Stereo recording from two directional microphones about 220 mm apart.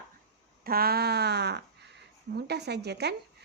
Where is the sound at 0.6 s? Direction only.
45° right (ahead or behind).